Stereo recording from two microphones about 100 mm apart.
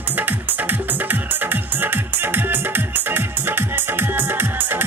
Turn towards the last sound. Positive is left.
turn(degrees=-20)  # may be behind; listen again after turning